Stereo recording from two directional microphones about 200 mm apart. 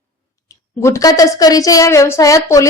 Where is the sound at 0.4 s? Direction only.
15° left (ahead or behind).